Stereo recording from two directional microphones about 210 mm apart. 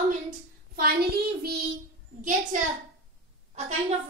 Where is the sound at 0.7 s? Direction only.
50° right (ahead or behind).